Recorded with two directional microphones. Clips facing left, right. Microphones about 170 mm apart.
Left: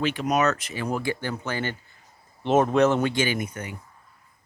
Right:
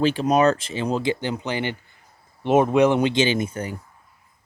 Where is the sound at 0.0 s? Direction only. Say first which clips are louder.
Right 5 dB; 30° right (ahead or behind).